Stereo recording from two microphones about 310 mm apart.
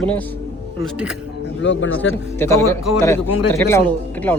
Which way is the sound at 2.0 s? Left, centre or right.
Centre.